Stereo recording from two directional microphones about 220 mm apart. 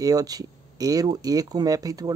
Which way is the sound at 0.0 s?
15° right (ahead or behind).